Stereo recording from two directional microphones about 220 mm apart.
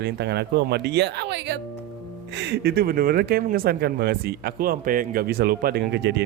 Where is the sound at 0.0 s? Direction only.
50° right (ahead or behind).